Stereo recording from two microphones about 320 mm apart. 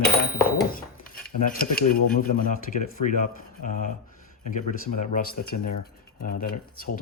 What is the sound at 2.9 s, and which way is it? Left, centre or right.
Speech, left.